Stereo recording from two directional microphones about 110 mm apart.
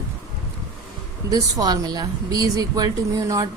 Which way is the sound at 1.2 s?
35° right (ahead or behind).